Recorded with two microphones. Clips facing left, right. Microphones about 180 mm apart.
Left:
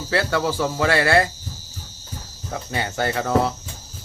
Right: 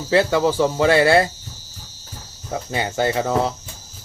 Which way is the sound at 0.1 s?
20° right (ahead or behind).